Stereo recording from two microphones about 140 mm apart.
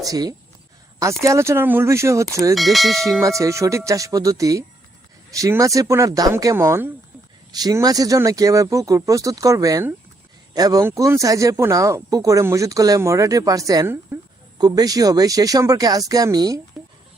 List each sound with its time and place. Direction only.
0.0 s speech: 25° right (ahead or behind)
2.6 s speech: centre (ahead or behind)
3.2 s speech: 20° right (ahead or behind)